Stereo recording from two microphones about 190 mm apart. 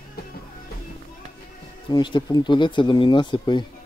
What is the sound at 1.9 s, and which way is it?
Speech, 25° left (ahead or behind).